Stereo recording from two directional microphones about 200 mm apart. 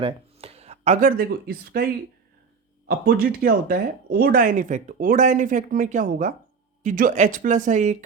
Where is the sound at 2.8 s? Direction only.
50° right (ahead or behind).